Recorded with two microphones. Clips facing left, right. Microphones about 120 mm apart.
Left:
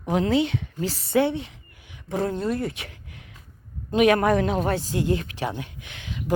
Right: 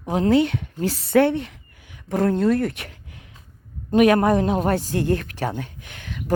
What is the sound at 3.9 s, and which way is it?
A woman's voice, 40° right (ahead or behind).